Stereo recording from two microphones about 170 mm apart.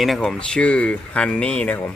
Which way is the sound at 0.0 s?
Centre (ahead or behind).